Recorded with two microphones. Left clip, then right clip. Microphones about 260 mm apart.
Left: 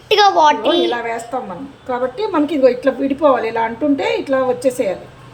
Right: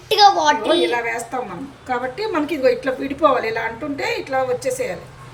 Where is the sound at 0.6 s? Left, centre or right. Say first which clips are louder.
Left 2 dB; centre.